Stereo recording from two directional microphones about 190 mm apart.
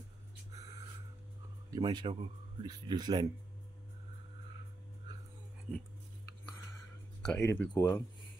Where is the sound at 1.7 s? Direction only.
25° right (ahead or behind).